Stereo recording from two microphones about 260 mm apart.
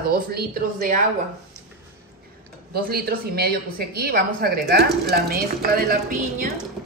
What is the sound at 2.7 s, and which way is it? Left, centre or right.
Speech, right.